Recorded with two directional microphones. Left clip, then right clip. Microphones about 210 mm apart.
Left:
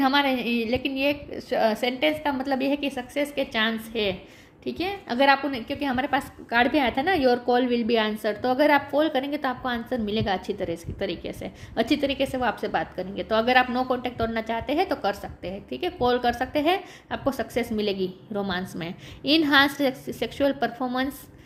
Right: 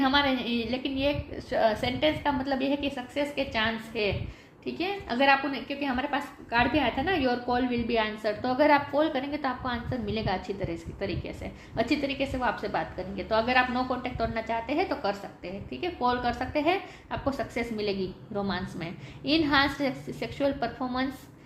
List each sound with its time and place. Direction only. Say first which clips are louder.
0.0 s a woman's voice: left 3 dB; 40° left (ahead or behind)